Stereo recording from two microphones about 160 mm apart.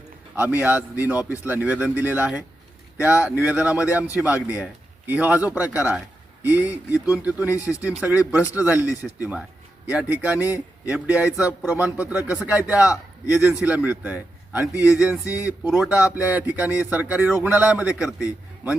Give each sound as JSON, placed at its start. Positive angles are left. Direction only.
{"t": 0.3, "sound": "a man's voice", "side_deg": -10}
{"t": 7.5, "sound": "speech", "side_deg": 20}
{"t": 7.8, "sound": "a man's voice", "side_deg": -10}
{"t": 15.2, "sound": "speech", "side_deg": 20}
{"t": 15.4, "sound": "a man's voice", "side_deg": -5}